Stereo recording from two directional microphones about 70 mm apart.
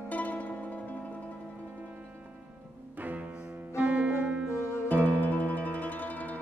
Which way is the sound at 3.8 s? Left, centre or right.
Centre.